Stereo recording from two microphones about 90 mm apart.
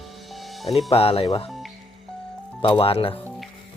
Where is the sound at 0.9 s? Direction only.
90° left.